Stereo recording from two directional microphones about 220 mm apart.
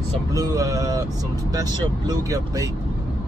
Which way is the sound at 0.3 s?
15° right (ahead or behind).